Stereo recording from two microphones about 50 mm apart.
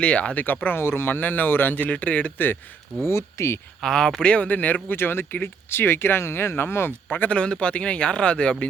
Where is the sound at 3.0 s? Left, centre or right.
Left.